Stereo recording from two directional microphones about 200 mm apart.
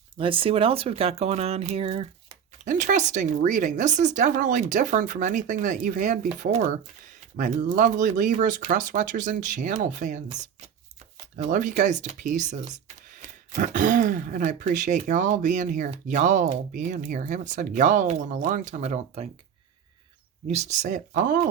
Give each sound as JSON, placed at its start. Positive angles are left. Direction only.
{"t": 0.2, "sound": "speech", "side_deg": -25}
{"t": 2.6, "sound": "speech", "side_deg": -40}
{"t": 20.5, "sound": "speech", "side_deg": -35}